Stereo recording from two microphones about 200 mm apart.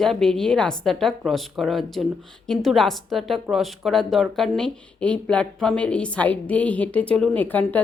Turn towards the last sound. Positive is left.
turn(degrees=10)  # may be behind; listen again after turning